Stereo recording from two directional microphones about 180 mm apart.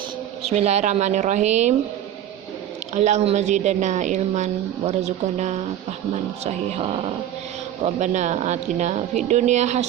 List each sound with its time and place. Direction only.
0.5 s a woman's voice: 35° right (ahead or behind)
2.9 s a woman's voice: 40° right (ahead or behind)
7.8 s a woman's voice: 40° right (ahead or behind)